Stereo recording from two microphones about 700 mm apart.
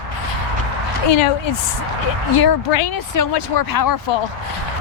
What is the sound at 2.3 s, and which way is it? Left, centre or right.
A woman's voice, left.